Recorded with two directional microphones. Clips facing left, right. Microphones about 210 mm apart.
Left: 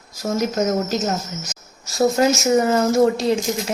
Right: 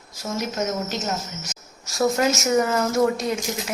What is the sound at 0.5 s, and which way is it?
Speech, 40° left (ahead or behind).